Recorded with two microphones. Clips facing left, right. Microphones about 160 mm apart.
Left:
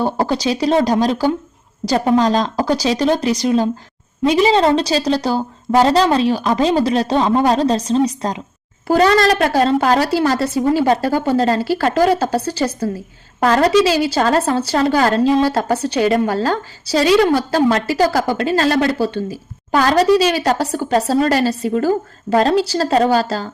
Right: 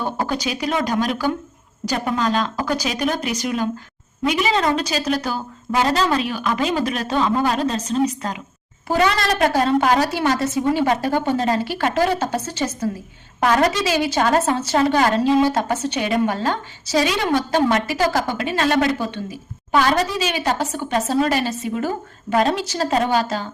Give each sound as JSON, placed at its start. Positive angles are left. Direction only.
{"t": 0.0, "sound": "a woman's voice", "side_deg": 35}